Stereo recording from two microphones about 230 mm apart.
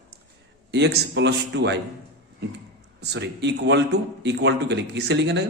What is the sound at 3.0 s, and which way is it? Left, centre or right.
A man's voice, right.